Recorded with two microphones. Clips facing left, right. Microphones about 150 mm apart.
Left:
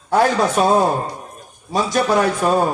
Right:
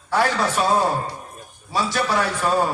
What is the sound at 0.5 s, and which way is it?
A man's voice, 45° left (ahead or behind).